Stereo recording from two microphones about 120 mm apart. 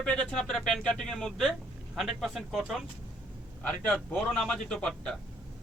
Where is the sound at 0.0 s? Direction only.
5° left (ahead or behind).